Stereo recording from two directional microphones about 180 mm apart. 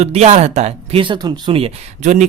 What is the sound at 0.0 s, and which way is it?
Speech, 35° right (ahead or behind).